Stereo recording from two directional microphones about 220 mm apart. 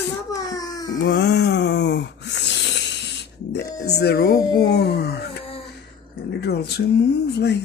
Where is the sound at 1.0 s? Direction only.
50° left (ahead or behind).